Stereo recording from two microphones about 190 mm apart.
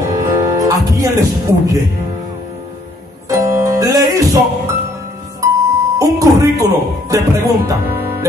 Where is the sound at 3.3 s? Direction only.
15° right (ahead or behind).